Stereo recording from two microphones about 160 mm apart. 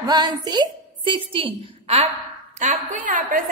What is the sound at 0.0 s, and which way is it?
A woman's voice, 25° right (ahead or behind).